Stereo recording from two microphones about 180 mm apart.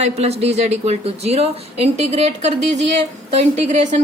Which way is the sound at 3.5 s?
40° right (ahead or behind).